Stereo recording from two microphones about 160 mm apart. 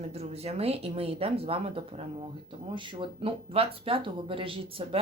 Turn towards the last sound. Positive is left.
turn(degrees=-35)  # may be behind; listen again after turning